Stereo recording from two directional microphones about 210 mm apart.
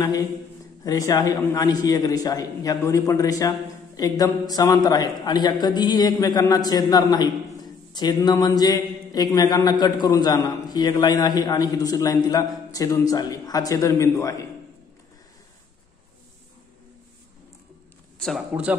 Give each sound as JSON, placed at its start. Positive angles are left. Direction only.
{"t": 0.8, "sound": "a man's voice", "side_deg": 15}
{"t": 18.5, "sound": "speech", "side_deg": -5}